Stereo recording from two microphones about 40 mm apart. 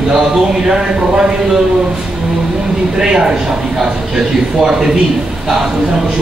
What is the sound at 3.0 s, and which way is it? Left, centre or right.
Speech, centre.